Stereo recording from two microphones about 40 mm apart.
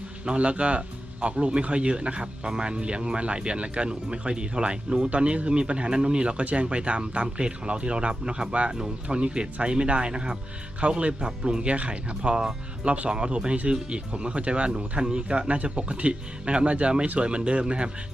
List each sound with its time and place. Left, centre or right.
0.3 s speech: right